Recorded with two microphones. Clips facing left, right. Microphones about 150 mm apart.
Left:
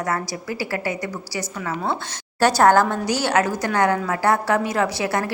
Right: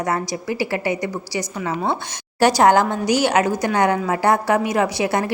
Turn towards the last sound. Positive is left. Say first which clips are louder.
# right 2 dB
turn(degrees=-20)  # may be behind; listen again after turning